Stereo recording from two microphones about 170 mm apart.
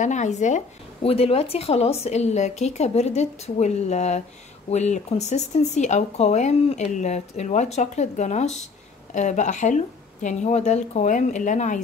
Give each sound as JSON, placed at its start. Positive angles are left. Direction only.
{"t": 0.0, "sound": "speech", "side_deg": 45}